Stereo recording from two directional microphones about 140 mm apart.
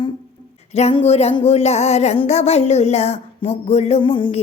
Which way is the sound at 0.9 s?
45° left (ahead or behind).